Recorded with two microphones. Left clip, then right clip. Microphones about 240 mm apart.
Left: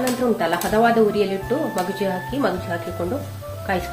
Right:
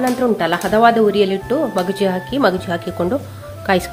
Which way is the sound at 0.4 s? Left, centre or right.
Right.